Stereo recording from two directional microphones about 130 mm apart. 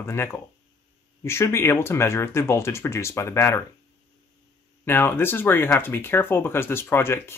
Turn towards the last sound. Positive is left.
turn(degrees=20)  # may be behind; listen again after turning